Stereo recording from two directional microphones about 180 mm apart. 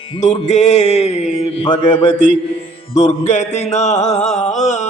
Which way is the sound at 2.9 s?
40° left (ahead or behind).